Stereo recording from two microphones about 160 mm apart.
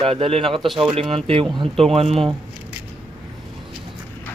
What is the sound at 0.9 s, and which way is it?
Speech, 35° right (ahead or behind).